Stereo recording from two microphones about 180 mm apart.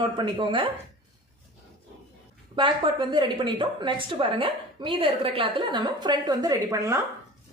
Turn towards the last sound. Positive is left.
turn(degrees=-15)  # may be behind; listen again after turning